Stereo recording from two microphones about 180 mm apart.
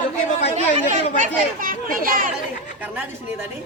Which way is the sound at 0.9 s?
45° right (ahead or behind).